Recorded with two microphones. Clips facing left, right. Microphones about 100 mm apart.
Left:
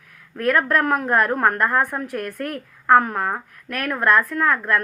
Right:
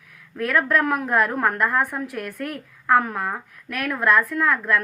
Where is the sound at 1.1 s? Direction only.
Centre (ahead or behind).